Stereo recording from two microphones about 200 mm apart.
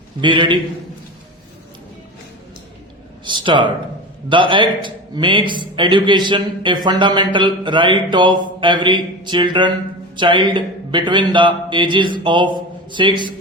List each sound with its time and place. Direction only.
0.2 s a man's voice: 25° right (ahead or behind)
3.2 s a sound: 25° right (ahead or behind)
4.3 s a man's voice: 25° right (ahead or behind)